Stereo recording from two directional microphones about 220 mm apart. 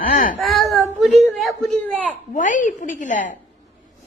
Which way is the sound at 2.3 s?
35° left (ahead or behind).